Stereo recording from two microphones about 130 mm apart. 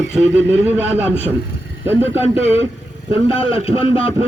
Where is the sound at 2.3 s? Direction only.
50° left (ahead or behind).